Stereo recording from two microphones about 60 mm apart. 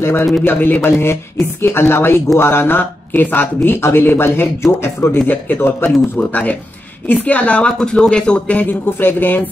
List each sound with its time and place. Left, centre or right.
0.0 s a man's voice: left
0.4 s speech: left
5.2 s speech: left
7.1 s a woman's voice: left
9.0 s speech: left